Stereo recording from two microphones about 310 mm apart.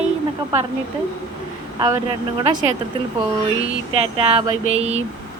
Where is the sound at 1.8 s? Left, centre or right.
Centre.